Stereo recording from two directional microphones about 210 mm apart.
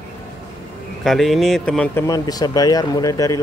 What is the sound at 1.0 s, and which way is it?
Speech, centre (ahead or behind).